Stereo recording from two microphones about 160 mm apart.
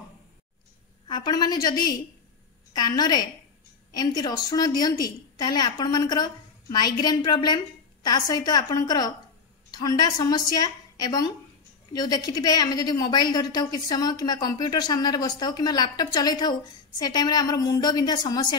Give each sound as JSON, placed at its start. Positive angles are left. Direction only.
{"t": 1.0, "sound": "a woman's voice", "side_deg": 25}